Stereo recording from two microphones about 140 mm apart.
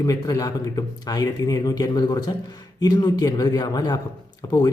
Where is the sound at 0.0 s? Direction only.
25° left (ahead or behind).